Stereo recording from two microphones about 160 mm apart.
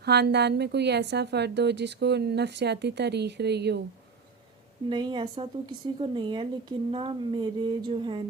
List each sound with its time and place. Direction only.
0.0 s a woman's voice: 90° right
4.9 s a woman's voice: 30° right (ahead or behind)